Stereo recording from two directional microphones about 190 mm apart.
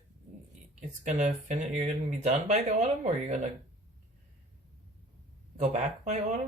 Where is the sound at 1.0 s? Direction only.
40° right (ahead or behind).